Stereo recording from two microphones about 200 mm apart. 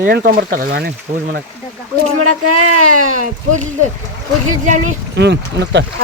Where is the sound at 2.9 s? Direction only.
40° right (ahead or behind).